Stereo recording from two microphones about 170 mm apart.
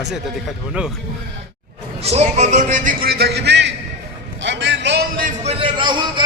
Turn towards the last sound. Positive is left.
turn(degrees=-30)  # may be behind; listen again after turning